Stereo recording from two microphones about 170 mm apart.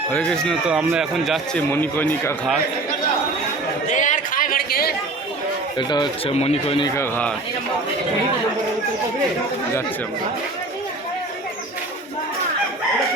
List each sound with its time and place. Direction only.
0.1 s speech: 5° left (ahead or behind)
0.7 s speech: 5° right (ahead or behind)
1.7 s speech: 10° left (ahead or behind)
3.8 s a sound: 45° left (ahead or behind); by 4.9 s 60° left (ahead or behind)
5.7 s speech: 25° left (ahead or behind)
6.9 s speech: 10° left (ahead or behind)